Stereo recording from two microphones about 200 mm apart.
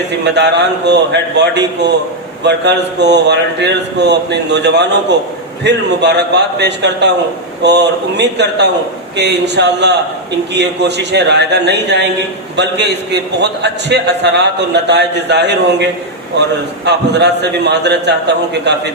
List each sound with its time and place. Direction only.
0.3 s a man's voice: 60° right (ahead or behind)